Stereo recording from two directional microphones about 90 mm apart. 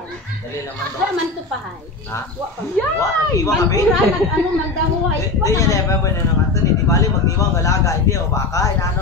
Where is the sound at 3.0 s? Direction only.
40° left (ahead or behind).